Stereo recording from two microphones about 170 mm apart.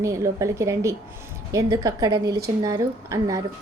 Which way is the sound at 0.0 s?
20° right (ahead or behind).